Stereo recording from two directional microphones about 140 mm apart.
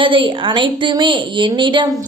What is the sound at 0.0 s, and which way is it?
A woman's voice, 35° right (ahead or behind).